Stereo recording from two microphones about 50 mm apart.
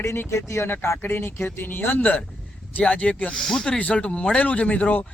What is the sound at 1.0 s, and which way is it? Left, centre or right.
Speech, left.